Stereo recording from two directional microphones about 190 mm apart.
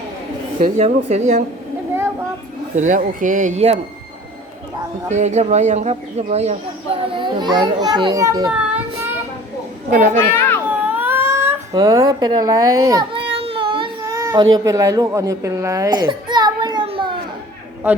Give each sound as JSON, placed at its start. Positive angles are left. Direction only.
{"t": 0.6, "sound": "speech", "side_deg": -35}
{"t": 2.7, "sound": "speech", "side_deg": -40}
{"t": 5.0, "sound": "speech", "side_deg": -35}
{"t": 9.9, "sound": "speech", "side_deg": -40}
{"t": 10.3, "sound": "children playing", "side_deg": 10}
{"t": 10.7, "sound": "a sound", "side_deg": -10}
{"t": 14.1, "sound": "a sound", "side_deg": -15}
{"t": 14.5, "sound": "a child's voice", "side_deg": -15}